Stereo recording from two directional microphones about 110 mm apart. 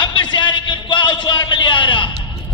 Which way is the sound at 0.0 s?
45° left (ahead or behind).